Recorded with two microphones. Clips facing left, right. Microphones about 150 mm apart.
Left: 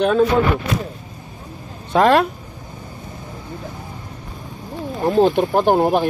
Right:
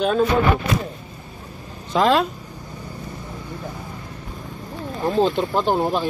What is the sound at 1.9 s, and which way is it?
Speech, 65° left (ahead or behind).